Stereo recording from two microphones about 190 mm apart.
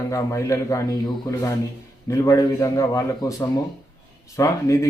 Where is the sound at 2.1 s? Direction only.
15° left (ahead or behind).